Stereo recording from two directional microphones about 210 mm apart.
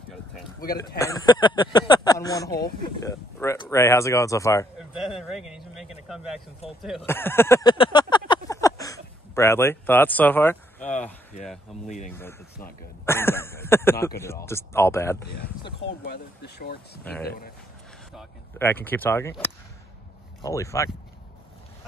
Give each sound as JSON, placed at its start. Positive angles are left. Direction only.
{"t": 0.7, "sound": "speech", "side_deg": 15}
{"t": 4.7, "sound": "a sound", "side_deg": -5}
{"t": 6.8, "sound": "speech", "side_deg": 0}
{"t": 7.1, "sound": "speech", "side_deg": 10}
{"t": 8.3, "sound": "a sound", "side_deg": 15}
{"t": 13.0, "sound": "speech", "side_deg": 10}
{"t": 16.0, "sound": "speech", "side_deg": 50}
{"t": 18.6, "sound": "speech", "side_deg": 10}